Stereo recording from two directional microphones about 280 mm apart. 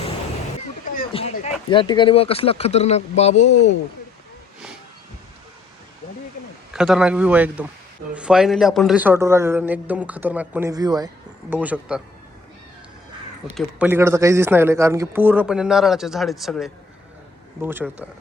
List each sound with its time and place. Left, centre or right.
0.9 s speech: left
6.7 s a man's voice: centre
13.6 s a man's voice: centre